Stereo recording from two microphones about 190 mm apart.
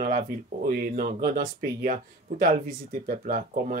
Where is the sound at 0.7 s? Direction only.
50° right (ahead or behind).